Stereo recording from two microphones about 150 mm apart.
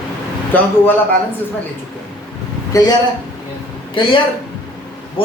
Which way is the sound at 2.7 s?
25° left (ahead or behind).